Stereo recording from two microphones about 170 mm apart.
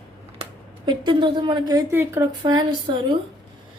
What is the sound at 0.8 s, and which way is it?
Speech, 30° right (ahead or behind).